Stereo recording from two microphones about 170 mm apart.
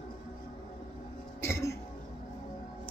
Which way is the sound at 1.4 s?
15° left (ahead or behind).